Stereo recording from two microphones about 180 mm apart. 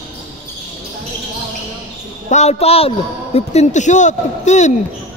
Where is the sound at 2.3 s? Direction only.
35° left (ahead or behind).